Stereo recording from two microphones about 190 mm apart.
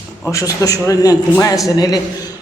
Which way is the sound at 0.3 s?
15° left (ahead or behind).